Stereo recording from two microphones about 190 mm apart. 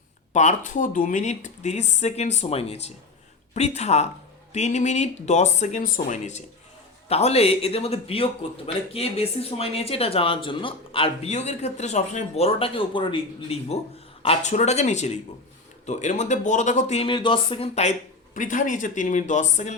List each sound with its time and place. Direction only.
0.3 s speech: 40° left (ahead or behind)
18.3 s speech: 45° left (ahead or behind)